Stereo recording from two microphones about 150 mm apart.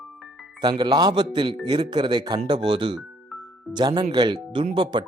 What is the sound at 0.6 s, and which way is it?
Speech, 30° right (ahead or behind).